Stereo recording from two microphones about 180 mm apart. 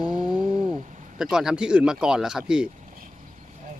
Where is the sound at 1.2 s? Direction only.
5° right (ahead or behind).